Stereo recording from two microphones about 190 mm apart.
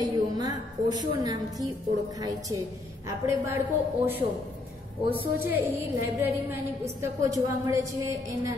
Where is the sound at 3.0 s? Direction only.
15° right (ahead or behind).